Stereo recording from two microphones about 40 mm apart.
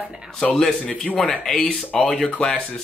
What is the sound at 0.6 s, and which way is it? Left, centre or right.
Speech, centre.